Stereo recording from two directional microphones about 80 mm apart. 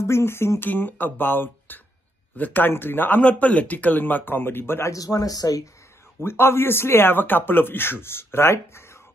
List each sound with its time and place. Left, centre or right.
0.0 s speech: left
4.9 s speech: left
6.2 s speech: left